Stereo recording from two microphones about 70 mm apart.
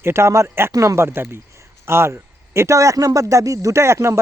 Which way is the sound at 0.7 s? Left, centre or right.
Right.